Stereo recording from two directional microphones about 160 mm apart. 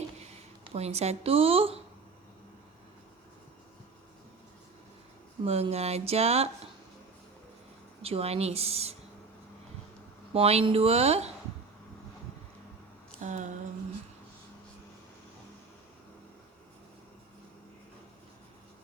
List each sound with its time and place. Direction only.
0.6 s a woman's voice: 40° right (ahead or behind)
5.5 s a woman's voice: 40° right (ahead or behind)
8.0 s a woman's voice: 40° right (ahead or behind)
10.3 s a woman's voice: 35° right (ahead or behind)
13.2 s a sound: 50° right (ahead or behind)